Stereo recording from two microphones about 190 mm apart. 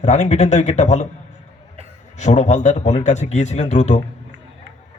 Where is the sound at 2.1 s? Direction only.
40° left (ahead or behind).